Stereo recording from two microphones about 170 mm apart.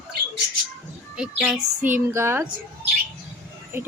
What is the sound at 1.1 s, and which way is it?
Speech, 5° right (ahead or behind).